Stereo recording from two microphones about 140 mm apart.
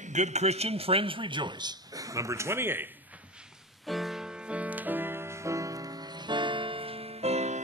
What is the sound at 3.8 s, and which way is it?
Music, centre (ahead or behind).